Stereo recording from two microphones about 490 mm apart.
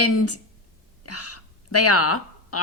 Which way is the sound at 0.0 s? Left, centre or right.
Left.